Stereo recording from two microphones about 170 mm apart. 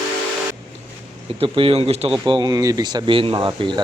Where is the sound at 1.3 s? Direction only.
30° right (ahead or behind).